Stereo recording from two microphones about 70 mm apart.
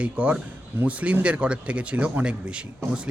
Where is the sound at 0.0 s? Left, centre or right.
Centre.